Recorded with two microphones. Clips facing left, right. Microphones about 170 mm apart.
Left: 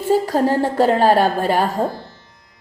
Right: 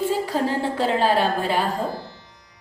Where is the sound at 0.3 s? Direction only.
45° left (ahead or behind).